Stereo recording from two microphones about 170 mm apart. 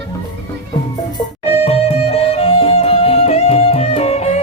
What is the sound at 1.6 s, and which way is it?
Music, 35° left (ahead or behind).